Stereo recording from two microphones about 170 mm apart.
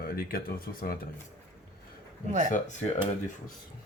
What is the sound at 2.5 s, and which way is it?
Speech, 45° left (ahead or behind).